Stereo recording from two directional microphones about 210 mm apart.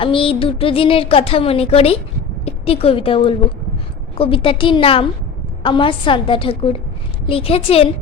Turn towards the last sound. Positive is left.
turn(degrees=25)  # may be behind; listen again after turning